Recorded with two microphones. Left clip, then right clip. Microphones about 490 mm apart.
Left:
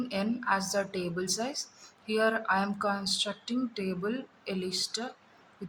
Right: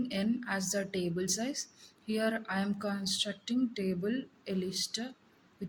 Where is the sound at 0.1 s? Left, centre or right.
Right.